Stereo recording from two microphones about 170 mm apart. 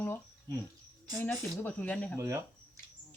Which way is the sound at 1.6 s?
10° left (ahead or behind).